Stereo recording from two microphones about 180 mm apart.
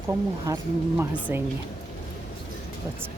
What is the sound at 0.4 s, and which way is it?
Speech, 20° right (ahead or behind).